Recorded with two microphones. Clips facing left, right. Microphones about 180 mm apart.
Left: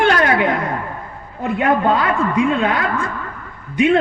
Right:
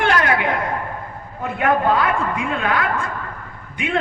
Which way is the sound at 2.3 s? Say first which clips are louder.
Left 5 dB; 25° left (ahead or behind).